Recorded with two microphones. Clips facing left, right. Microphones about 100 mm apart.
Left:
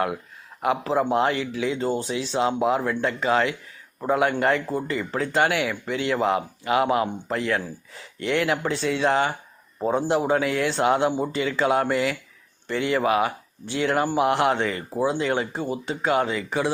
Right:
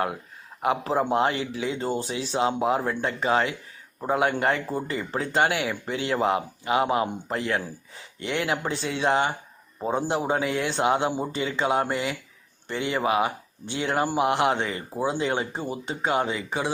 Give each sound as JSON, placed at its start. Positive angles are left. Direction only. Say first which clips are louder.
{"t": 0.6, "sound": "speech", "louder": "left 2 dB", "side_deg": -30}